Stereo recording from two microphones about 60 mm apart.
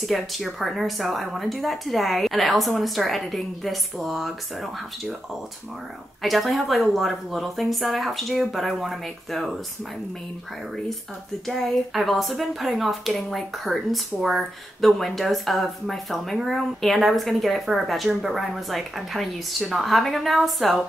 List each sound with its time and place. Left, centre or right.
0.0 s speech: centre
6.2 s speech: centre
11.4 s speech: centre